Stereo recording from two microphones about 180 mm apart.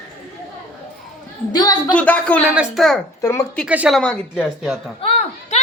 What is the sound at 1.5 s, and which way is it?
Speech, 20° left (ahead or behind).